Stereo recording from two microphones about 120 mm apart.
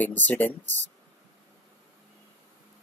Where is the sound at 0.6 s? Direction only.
80° right.